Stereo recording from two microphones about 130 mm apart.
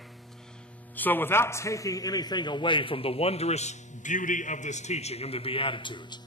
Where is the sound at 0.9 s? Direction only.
15° left (ahead or behind); by 6.1 s 35° left (ahead or behind).